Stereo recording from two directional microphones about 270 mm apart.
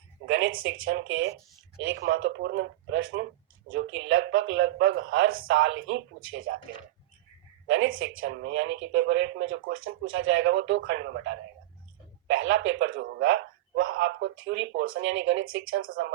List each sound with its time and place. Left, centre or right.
0.3 s speech: right
7.7 s speech: right